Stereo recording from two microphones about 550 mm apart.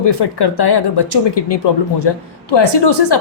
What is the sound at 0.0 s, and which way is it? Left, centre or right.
Speech, left.